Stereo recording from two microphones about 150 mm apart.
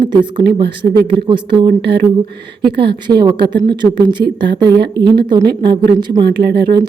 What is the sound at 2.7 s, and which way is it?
A woman's voice, 35° right (ahead or behind).